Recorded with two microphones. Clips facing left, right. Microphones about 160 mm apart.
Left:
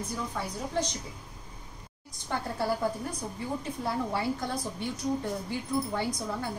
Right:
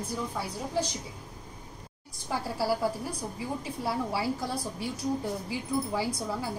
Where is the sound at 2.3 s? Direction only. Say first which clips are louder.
Right 1 dB; 5° right (ahead or behind).